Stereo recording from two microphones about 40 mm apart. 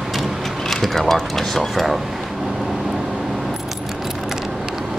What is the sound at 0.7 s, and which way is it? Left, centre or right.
Speech, centre.